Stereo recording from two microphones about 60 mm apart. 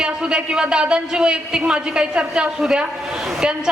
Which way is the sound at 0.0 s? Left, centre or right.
Centre.